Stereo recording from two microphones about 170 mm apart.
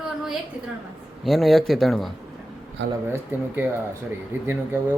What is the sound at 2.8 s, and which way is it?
Speech, 90° right.